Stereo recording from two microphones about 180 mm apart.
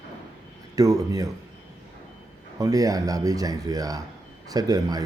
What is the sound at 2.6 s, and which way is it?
Speech, 20° right (ahead or behind).